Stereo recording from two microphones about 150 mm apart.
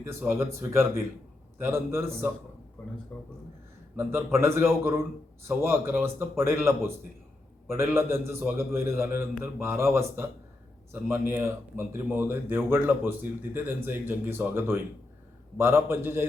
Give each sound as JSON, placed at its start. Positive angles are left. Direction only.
{"t": 0.0, "sound": "speech", "side_deg": -15}
{"t": 3.1, "sound": "speech", "side_deg": 10}
{"t": 3.9, "sound": "speech", "side_deg": -15}